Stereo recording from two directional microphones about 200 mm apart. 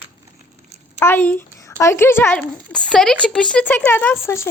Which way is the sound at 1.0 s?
10° left (ahead or behind).